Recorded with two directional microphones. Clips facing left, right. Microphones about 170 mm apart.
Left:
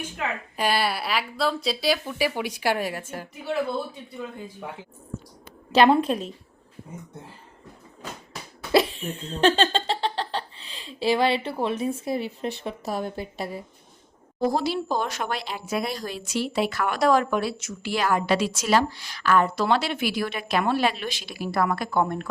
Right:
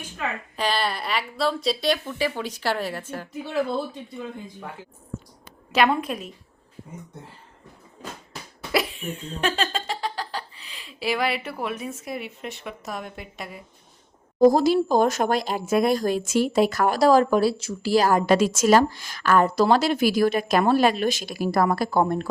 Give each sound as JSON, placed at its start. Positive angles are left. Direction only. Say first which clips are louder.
{"t": 0.5, "sound": "speech", "louder": "left 1 dB", "side_deg": 10}
{"t": 5.7, "sound": "a woman's voice", "louder": "left 4 dB", "side_deg": 30}
{"t": 8.7, "sound": "laughter", "louder": "left 4 dB", "side_deg": 30}
{"t": 12.6, "sound": "a woman's voice", "louder": "left 3 dB", "side_deg": 30}
{"t": 14.3, "sound": "speech", "louder": "right 8 dB", "side_deg": -40}